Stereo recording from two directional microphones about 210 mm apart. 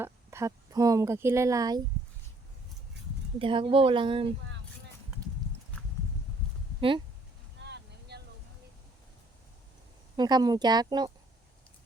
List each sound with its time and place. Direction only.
0.0 s speech: 15° right (ahead or behind)
3.0 s a sound: 55° right (ahead or behind)
3.3 s speech: 25° right (ahead or behind)
7.6 s vehicle: 50° right (ahead or behind)
10.2 s speech: 20° right (ahead or behind)